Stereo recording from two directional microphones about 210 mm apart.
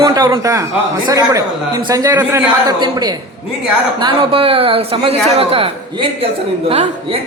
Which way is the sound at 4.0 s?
25° right (ahead or behind).